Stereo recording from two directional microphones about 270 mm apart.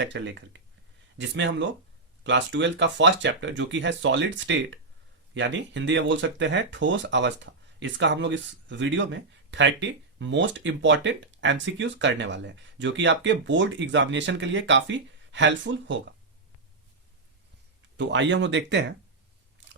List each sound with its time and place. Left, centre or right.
0.0 s speech: right
17.9 s speech: right
19.6 s biting: right